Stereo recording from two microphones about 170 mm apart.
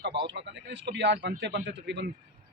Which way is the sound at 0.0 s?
90° right.